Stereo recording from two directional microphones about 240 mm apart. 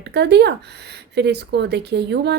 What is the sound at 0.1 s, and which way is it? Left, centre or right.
A woman's voice, right.